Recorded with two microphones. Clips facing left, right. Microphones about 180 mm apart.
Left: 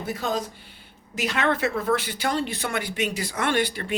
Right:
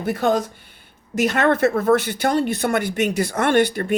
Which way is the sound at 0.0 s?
55° right (ahead or behind).